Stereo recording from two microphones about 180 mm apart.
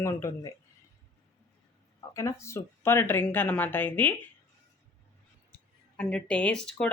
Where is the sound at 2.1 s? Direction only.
15° left (ahead or behind).